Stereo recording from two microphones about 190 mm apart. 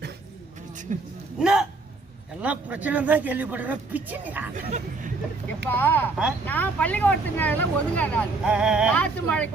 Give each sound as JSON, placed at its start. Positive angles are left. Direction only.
{"t": 0.9, "sound": "speech", "side_deg": -40}
{"t": 1.4, "sound": "a sound", "side_deg": -5}
{"t": 2.4, "sound": "speech", "side_deg": -10}
{"t": 4.5, "sound": "speech", "side_deg": -40}
{"t": 5.6, "sound": "speech", "side_deg": 10}
{"t": 8.4, "sound": "a sound", "side_deg": -5}
{"t": 9.0, "sound": "speech", "side_deg": 5}